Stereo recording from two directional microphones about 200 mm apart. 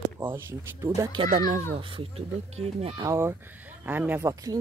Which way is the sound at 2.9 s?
15° right (ahead or behind).